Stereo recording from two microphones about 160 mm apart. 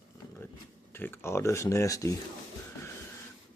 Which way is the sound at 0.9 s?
15° left (ahead or behind).